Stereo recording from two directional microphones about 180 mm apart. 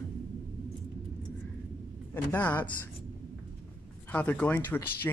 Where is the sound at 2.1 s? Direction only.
10° left (ahead or behind).